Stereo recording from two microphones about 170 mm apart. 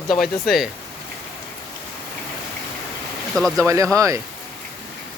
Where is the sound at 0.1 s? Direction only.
Centre (ahead or behind).